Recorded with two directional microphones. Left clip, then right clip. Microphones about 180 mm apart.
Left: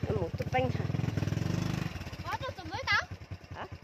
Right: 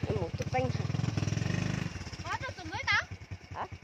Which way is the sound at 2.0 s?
55° left (ahead or behind).